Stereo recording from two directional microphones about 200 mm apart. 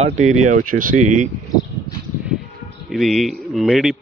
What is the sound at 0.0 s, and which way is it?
Speech, 40° right (ahead or behind).